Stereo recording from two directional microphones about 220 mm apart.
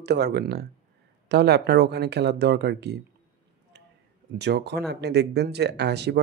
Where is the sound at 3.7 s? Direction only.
50° right (ahead or behind).